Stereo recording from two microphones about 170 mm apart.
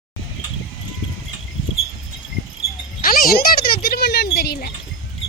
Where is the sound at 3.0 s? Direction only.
60° left (ahead or behind).